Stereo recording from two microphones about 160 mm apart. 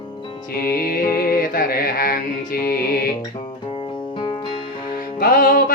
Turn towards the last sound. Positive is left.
turn(degrees=60)  # may be behind; listen again after turning